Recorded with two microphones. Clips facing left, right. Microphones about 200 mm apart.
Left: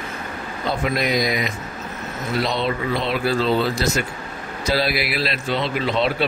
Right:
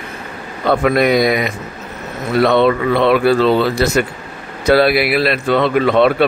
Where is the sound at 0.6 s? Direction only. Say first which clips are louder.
Right 9 dB; 60° right (ahead or behind).